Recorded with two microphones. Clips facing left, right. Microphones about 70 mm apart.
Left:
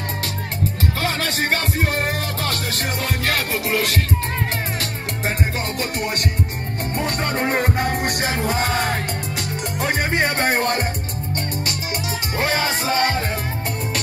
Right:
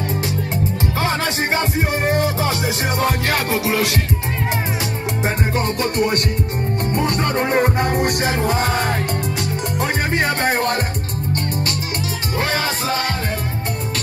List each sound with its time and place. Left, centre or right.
1.0 s music: centre
5.8 s music: centre
10.4 s music: left
12.4 s music: centre